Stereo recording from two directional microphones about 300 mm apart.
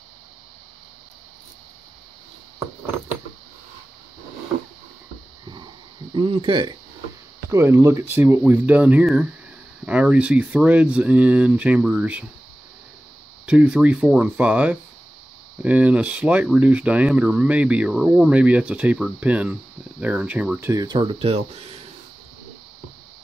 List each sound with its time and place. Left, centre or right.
6.1 s speech: centre
13.5 s speech: centre; by 21.7 s right